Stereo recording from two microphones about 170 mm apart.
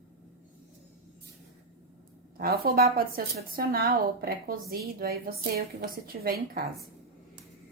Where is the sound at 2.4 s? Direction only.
60° right (ahead or behind).